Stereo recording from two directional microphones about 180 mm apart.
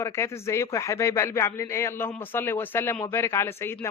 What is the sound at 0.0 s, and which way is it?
Speech, 15° left (ahead or behind).